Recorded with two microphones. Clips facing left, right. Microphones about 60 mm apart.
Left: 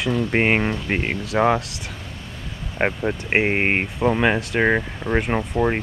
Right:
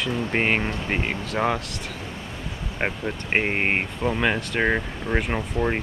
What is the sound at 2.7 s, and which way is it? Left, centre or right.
Speech, centre.